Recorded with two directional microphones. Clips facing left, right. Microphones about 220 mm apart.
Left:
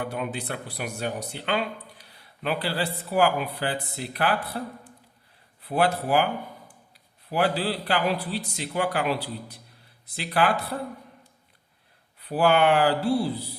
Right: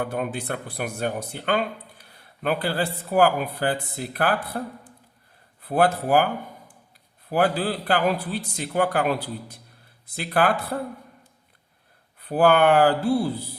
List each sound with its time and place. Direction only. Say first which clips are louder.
0.0 s speech: right 3 dB; 50° right (ahead or behind)
5.6 s speech: right 3 dB; 50° right (ahead or behind)
7.3 s speech: right 3 dB; 50° right (ahead or behind)
12.2 s speech: right 3 dB; 50° right (ahead or behind)